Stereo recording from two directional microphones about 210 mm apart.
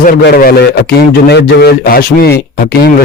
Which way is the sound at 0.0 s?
45° left (ahead or behind).